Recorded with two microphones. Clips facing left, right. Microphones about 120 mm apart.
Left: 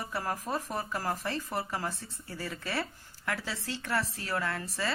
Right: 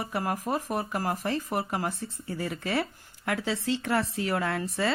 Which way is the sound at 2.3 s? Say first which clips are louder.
Right 6 dB; 55° right (ahead or behind).